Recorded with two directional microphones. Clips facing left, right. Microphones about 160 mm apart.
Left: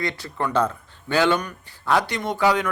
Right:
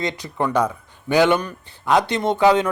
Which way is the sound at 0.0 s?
20° right (ahead or behind).